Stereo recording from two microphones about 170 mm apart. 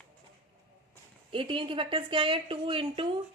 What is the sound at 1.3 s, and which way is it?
A woman's voice, 30° right (ahead or behind).